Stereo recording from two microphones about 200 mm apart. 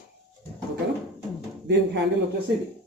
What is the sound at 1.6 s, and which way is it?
Speech, 60° right (ahead or behind).